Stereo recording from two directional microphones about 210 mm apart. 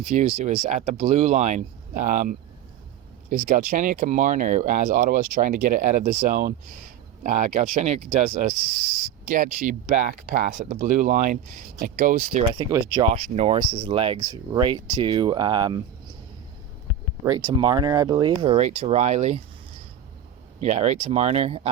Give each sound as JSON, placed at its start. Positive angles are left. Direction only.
{"t": 0.0, "sound": "speech", "side_deg": -35}
{"t": 12.7, "sound": "speech", "side_deg": -20}
{"t": 13.1, "sound": "speech", "side_deg": -30}
{"t": 17.2, "sound": "speech", "side_deg": -20}
{"t": 20.6, "sound": "speech", "side_deg": -35}